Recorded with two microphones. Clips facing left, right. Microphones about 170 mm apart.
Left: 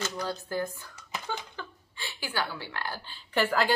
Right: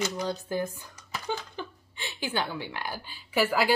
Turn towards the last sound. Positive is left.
turn(degrees=-10)  # may be behind; listen again after turning